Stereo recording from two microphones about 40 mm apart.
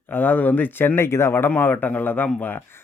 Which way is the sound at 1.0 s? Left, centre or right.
Left.